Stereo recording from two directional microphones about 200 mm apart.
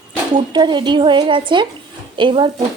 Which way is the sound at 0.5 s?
20° right (ahead or behind).